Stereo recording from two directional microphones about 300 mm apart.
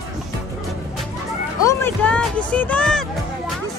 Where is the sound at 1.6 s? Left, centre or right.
Centre.